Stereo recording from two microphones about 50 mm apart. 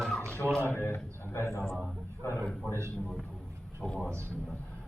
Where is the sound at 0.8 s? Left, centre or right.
Left.